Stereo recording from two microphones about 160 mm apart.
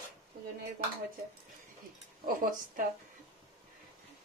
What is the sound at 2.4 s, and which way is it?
Speech, 60° right (ahead or behind).